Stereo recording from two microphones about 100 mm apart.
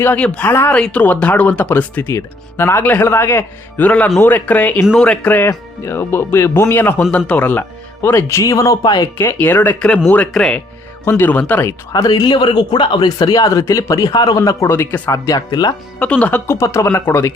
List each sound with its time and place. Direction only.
0.0 s speech: 20° left (ahead or behind); by 8.8 s 35° left (ahead or behind)
8.8 s a man's voice: 45° left (ahead or behind)
9.4 s speech: 20° left (ahead or behind)
11.9 s a man's voice: 35° left (ahead or behind)
13.1 s speech: 40° left (ahead or behind)
14.7 s speech: 20° left (ahead or behind)
15.1 s speech: 35° left (ahead or behind)
15.4 s a man's voice: 45° left (ahead or behind)
16.0 s speech: 10° left (ahead or behind)
16.5 s speech: 30° left (ahead or behind)